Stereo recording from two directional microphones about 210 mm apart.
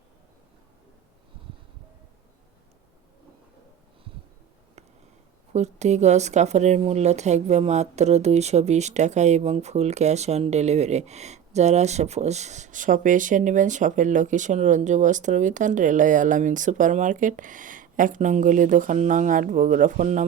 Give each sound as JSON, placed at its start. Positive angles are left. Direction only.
{"t": 5.5, "sound": "speech", "side_deg": -30}